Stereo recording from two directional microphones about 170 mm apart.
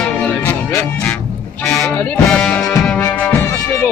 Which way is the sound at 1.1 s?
5° left (ahead or behind).